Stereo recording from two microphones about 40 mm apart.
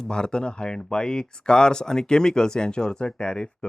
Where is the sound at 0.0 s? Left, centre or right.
Left.